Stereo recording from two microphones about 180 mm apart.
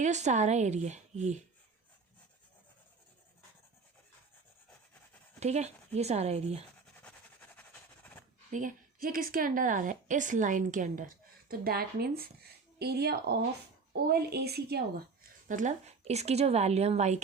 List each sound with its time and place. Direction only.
0.0 s a woman's voice: 40° right (ahead or behind)
5.4 s a woman's voice: 40° right (ahead or behind)
8.5 s a woman's voice: 50° right (ahead or behind)
11.4 s a woman's voice: 55° right (ahead or behind)
15.4 s a woman's voice: 45° right (ahead or behind)